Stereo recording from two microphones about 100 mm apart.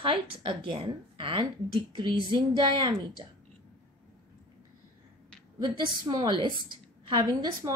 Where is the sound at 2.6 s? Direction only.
50° right (ahead or behind).